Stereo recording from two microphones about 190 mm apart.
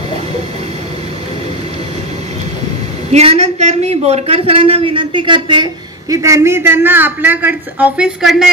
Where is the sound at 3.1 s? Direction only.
35° right (ahead or behind).